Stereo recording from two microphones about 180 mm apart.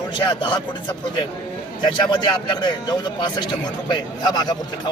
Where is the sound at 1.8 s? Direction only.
25° left (ahead or behind).